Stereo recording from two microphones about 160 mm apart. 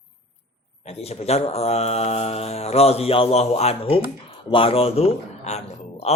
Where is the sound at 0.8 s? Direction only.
40° left (ahead or behind).